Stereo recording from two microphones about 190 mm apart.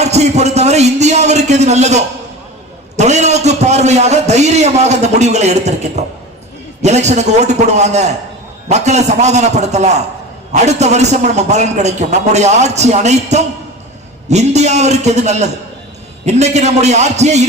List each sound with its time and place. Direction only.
0.0 s a man's voice: 35° right (ahead or behind)